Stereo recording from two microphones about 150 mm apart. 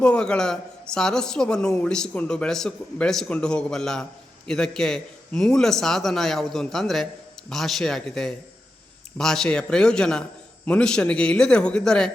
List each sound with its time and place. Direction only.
0.0 s a man's voice: 5° left (ahead or behind)